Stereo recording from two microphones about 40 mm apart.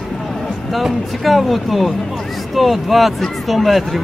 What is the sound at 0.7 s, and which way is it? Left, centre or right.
Speech, centre.